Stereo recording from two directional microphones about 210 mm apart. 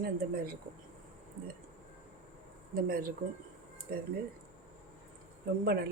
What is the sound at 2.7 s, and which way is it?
A woman's voice, 45° right (ahead or behind).